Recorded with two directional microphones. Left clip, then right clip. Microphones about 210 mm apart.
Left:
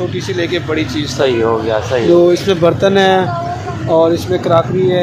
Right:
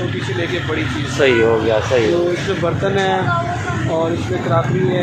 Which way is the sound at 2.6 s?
55° left (ahead or behind).